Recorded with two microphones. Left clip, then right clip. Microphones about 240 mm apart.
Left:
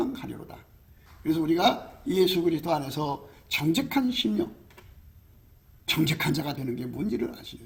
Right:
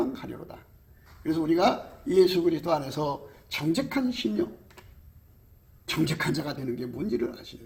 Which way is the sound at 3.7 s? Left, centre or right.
Left.